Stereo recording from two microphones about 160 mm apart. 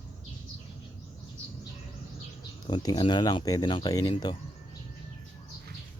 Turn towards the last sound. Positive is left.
turn(degrees=25)  # may be behind; listen again after turning